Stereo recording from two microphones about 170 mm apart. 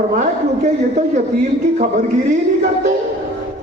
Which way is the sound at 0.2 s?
45° right (ahead or behind).